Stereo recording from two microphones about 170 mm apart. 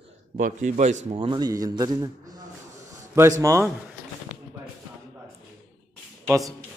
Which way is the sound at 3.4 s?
20° right (ahead or behind).